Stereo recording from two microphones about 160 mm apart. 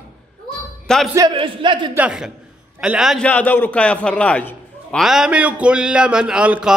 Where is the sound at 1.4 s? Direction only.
30° right (ahead or behind).